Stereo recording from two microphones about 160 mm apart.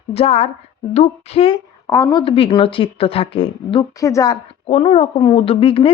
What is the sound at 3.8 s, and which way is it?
Speech, 20° left (ahead or behind).